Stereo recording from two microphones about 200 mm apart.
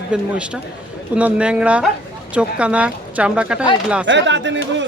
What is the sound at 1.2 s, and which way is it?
Speech, 5° right (ahead or behind).